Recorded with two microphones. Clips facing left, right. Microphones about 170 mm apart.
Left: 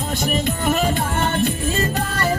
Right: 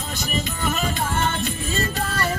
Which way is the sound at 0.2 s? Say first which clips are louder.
Left 3 dB; 50° left (ahead or behind).